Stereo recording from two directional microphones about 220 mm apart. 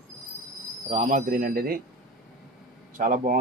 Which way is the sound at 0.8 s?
35° right (ahead or behind).